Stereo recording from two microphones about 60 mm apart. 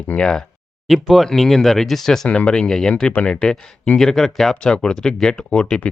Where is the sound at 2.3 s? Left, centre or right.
Centre.